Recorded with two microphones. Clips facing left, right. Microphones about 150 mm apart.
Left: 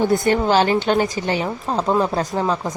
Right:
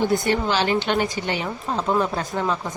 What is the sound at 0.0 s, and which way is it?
Speech, 50° left (ahead or behind).